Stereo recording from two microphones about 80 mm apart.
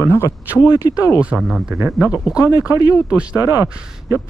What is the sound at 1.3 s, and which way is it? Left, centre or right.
Speech, right.